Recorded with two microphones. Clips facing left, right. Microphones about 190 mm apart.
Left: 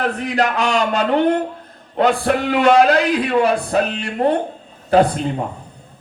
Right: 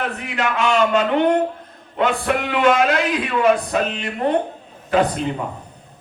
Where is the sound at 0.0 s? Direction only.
35° left (ahead or behind).